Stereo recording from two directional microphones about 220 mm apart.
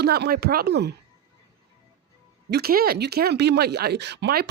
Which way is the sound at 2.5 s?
45° right (ahead or behind).